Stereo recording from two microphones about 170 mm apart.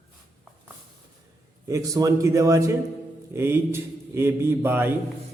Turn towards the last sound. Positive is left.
turn(degrees=-15)  # may be behind; listen again after turning